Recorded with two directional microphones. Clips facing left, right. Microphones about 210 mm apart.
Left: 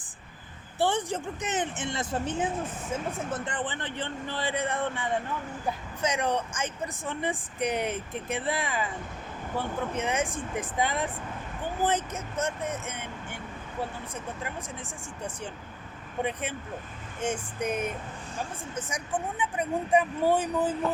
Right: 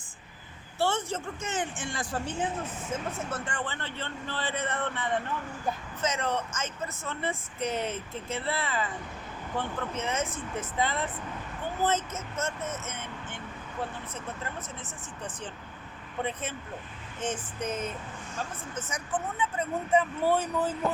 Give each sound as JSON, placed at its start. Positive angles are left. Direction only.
{"t": 0.8, "sound": "speech", "side_deg": 15}
{"t": 14.4, "sound": "speech", "side_deg": 10}